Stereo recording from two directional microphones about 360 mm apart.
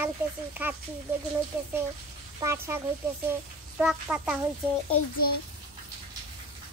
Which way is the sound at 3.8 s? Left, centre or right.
Centre.